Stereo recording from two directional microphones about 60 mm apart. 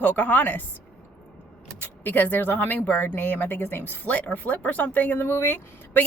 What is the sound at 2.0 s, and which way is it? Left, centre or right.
A woman's voice, left.